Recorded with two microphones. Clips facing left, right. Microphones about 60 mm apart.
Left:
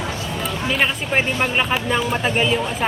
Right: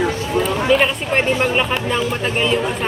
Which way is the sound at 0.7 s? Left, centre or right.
Centre.